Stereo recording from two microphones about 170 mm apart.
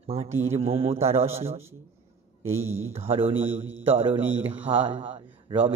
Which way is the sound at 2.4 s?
15° right (ahead or behind).